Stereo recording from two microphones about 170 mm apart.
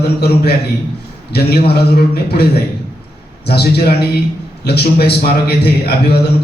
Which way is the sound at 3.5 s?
70° left (ahead or behind).